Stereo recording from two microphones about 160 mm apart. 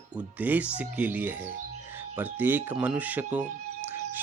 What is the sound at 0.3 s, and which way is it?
Speech, 10° right (ahead or behind).